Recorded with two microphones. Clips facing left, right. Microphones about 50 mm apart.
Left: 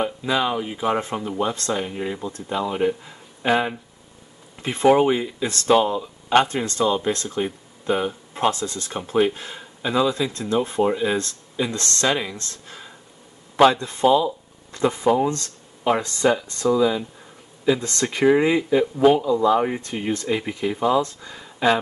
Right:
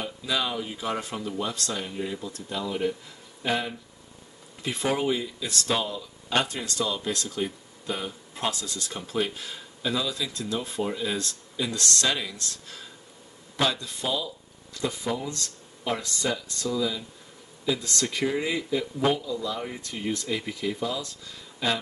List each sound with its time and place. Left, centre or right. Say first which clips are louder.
0.0 s speech: left 7 dB; left